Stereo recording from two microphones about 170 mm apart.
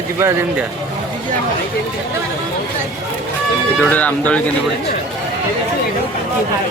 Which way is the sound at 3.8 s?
10° left (ahead or behind).